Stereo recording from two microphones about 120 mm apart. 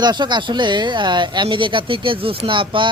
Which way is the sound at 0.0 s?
35° right (ahead or behind).